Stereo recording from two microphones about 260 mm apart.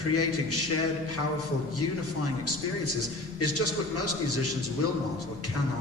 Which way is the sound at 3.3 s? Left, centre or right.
Left.